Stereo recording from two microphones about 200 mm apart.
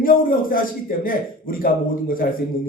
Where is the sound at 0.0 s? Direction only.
45° left (ahead or behind).